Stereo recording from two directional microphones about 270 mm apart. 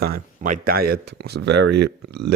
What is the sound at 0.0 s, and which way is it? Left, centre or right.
Speech, right.